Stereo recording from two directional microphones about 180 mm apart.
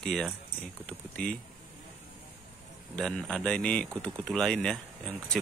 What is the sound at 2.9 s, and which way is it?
Speech, 5° left (ahead or behind).